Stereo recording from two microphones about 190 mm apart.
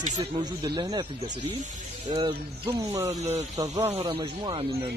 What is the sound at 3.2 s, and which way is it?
Speech, 35° right (ahead or behind).